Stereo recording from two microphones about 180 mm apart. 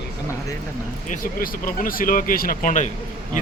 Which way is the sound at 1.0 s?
50° left (ahead or behind).